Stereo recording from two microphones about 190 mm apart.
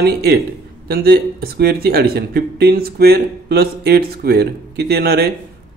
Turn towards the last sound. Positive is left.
turn(degrees=-55)  # may be behind; listen again after turning